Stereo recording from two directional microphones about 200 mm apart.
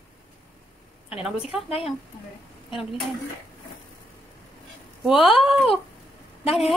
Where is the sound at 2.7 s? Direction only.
Centre (ahead or behind).